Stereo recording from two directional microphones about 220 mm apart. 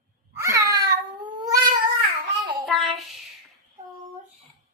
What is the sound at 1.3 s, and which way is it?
Cat, 20° right (ahead or behind).